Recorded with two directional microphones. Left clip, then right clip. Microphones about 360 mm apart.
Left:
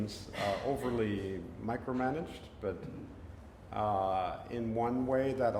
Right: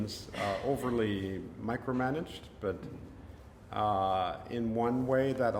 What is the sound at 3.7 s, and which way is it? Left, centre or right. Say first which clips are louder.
Speech: right 2 dB; centre.